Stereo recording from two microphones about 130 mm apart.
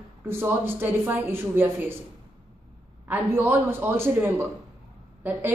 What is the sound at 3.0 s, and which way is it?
Speech, 15° right (ahead or behind).